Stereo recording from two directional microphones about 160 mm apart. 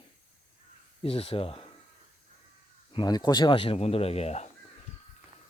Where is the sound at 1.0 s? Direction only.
35° left (ahead or behind).